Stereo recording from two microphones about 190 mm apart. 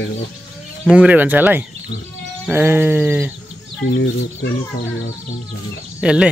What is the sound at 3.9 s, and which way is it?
Speech, 70° left (ahead or behind).